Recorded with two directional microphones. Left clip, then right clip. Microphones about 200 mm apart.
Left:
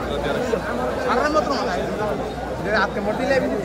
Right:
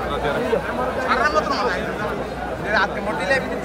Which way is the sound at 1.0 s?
35° left (ahead or behind).